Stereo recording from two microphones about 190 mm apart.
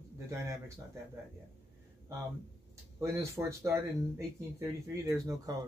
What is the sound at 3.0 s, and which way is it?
Speech, 15° right (ahead or behind).